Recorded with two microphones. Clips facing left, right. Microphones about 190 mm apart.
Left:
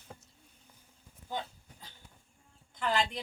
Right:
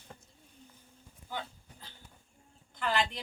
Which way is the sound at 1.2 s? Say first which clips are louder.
Left 2 dB; 15° left (ahead or behind).